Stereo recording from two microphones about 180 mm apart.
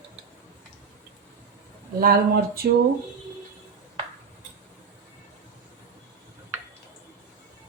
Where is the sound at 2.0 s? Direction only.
55° right (ahead or behind).